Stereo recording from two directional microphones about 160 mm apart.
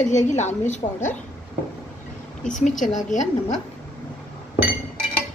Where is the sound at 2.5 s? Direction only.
55° left (ahead or behind).